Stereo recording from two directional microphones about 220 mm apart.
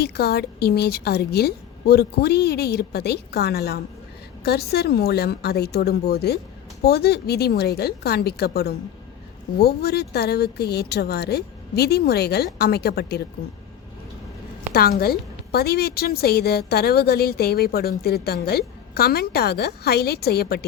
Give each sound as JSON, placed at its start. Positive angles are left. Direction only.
{"t": 0.0, "sound": "a woman's voice", "side_deg": 45}
{"t": 14.7, "sound": "a woman's voice", "side_deg": 45}